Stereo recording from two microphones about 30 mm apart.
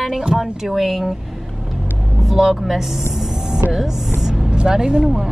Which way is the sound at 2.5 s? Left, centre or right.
Centre.